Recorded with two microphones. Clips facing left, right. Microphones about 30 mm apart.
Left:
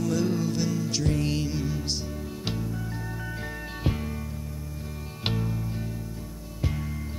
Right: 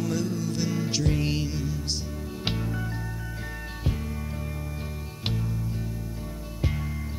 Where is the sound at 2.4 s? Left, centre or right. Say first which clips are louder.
Right 3 dB; right.